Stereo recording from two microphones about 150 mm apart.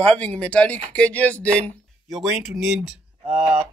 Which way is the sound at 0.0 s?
5° left (ahead or behind).